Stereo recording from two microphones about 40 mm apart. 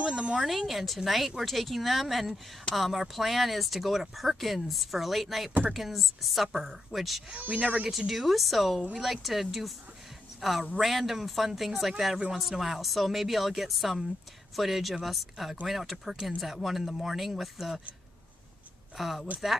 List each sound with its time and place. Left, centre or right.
0.0 s a sound: right
0.4 s speech: centre
7.3 s speech: right
8.1 s speech: centre
18.9 s speech: centre